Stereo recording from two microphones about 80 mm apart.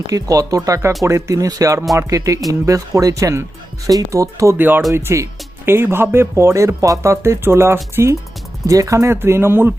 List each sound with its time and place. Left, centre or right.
0.1 s speech: right
4.5 s speech: right
4.9 s speech: right